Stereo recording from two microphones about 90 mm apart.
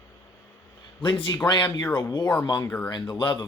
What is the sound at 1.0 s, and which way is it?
Speech, 60° left (ahead or behind).